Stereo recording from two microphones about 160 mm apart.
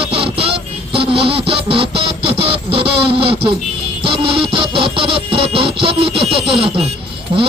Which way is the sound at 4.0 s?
35° right (ahead or behind).